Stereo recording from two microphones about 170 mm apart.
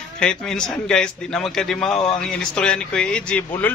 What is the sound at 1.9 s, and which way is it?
Speech, 30° left (ahead or behind).